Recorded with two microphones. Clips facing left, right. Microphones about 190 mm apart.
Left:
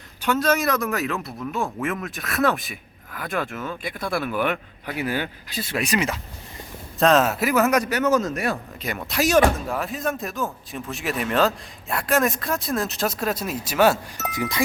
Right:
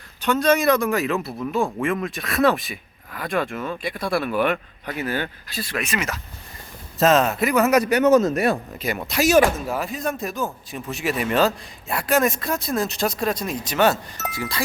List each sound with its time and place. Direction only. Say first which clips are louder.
0.2 s speech: right 2 dB; 5° left (ahead or behind); by 5.8 s 20° left (ahead or behind)
5.8 s speech: left 5 dB; 35° left (ahead or behind)
7.0 s speech: right 1 dB; centre (ahead or behind)
7.9 s speech: right 5 dB; 15° right (ahead or behind)
8.8 s speech: even; 5° right (ahead or behind)
14.3 s speech: left 3 dB; 15° left (ahead or behind)